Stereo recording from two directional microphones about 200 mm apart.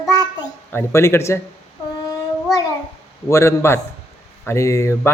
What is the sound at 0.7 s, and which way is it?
Speech, 10° left (ahead or behind).